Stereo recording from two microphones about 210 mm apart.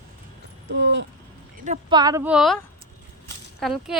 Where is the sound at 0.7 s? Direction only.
55° right (ahead or behind).